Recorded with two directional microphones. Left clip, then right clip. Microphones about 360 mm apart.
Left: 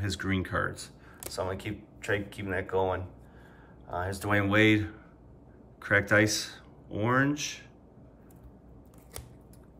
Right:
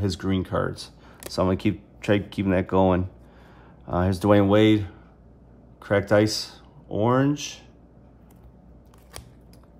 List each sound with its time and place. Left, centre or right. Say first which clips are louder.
0.0 s speech: right 5 dB; centre